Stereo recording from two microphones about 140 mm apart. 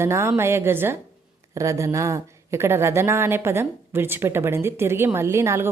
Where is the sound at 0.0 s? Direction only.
20° right (ahead or behind).